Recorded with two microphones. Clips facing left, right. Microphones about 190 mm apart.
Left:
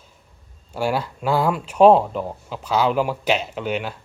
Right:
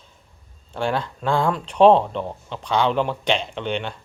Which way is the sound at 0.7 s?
5° left (ahead or behind).